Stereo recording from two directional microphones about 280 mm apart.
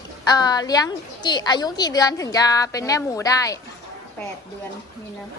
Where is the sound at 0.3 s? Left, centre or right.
Centre.